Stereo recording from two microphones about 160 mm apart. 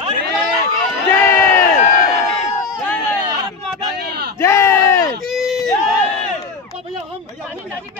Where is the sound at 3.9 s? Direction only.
85° right.